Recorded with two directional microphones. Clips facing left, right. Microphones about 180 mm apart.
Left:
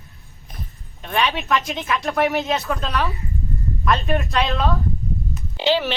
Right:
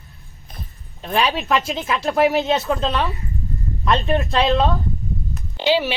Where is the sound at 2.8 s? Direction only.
20° right (ahead or behind).